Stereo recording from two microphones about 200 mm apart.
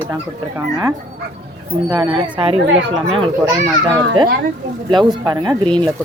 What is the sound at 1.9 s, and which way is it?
Speech, 20° right (ahead or behind).